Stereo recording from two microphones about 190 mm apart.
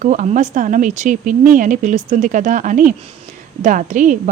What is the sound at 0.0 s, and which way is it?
A woman's voice, 40° right (ahead or behind).